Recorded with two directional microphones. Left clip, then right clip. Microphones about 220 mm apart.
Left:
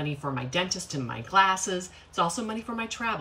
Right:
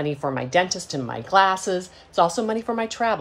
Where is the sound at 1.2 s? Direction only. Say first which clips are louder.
Right 4 dB; 50° right (ahead or behind).